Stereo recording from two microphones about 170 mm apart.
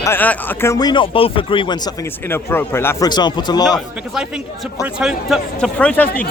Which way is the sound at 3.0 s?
25° left (ahead or behind).